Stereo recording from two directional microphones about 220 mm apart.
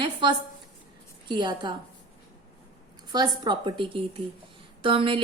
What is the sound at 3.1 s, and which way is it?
A woman's voice, 20° right (ahead or behind).